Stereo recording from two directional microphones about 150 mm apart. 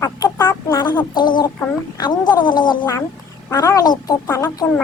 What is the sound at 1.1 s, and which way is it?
Speech, 30° left (ahead or behind).